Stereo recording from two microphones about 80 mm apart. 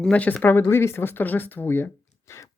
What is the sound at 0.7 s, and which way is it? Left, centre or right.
Speech, left.